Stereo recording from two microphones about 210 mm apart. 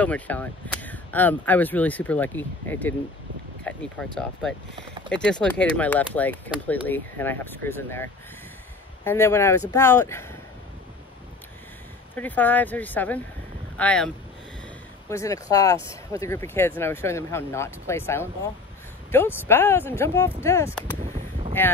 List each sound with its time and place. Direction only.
0.0 s speech: 5° left (ahead or behind)
12.2 s speech: 10° left (ahead or behind)
15.0 s speech: 15° left (ahead or behind)
21.0 s a sound: 35° right (ahead or behind)